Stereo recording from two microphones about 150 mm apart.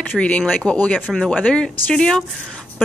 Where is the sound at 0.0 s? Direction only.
10° left (ahead or behind).